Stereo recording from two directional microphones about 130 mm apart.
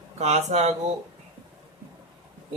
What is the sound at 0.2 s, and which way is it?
Speech, 55° right (ahead or behind).